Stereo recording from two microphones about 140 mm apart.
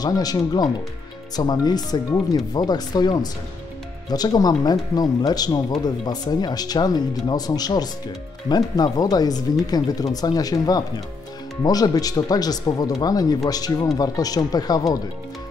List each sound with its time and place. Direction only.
0.0 s speech: 25° left (ahead or behind)